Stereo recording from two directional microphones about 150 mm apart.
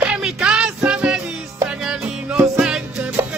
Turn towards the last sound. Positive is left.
turn(degrees=-5)  # may be behind; listen again after turning